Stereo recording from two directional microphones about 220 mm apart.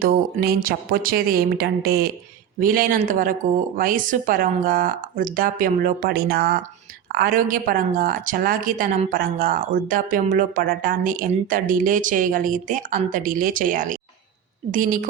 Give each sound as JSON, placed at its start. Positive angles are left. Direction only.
{"t": 0.0, "sound": "a woman's voice", "side_deg": -45}